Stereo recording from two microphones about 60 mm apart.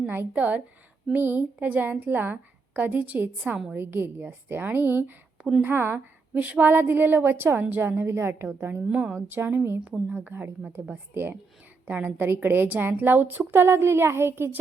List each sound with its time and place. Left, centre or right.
0.1 s a woman's voice: right
3.4 s a woman's voice: centre
3.8 s a woman's voice: right
8.9 s a woman's voice: centre
9.3 s a woman's voice: right